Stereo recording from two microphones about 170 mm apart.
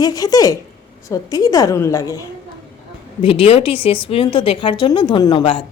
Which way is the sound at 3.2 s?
35° left (ahead or behind).